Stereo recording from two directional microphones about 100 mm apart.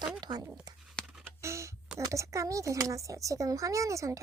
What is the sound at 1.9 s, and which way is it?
Speech, 30° right (ahead or behind).